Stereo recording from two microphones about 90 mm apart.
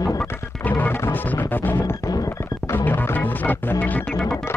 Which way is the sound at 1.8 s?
40° left (ahead or behind).